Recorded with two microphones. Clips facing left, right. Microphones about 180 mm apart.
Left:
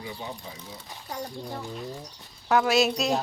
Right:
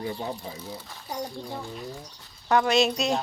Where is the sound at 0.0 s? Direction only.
45° right (ahead or behind).